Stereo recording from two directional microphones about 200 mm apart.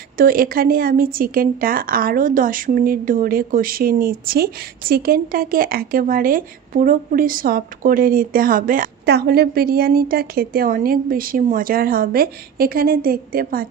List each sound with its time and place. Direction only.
0.2 s speech: 45° right (ahead or behind)